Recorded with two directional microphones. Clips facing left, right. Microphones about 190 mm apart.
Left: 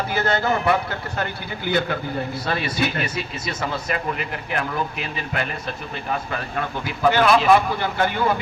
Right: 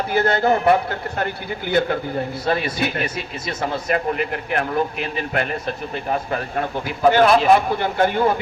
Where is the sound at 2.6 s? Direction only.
50° right (ahead or behind).